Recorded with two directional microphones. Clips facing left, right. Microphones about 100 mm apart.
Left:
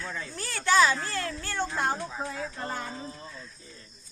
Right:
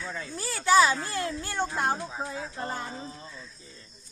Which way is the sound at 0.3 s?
5° right (ahead or behind).